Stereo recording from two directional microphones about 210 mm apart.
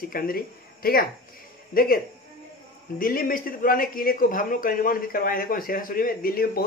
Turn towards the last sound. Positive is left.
turn(degrees=45)  # may be behind; listen again after turning